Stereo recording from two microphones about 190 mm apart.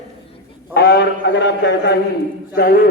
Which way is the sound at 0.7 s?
55° left (ahead or behind).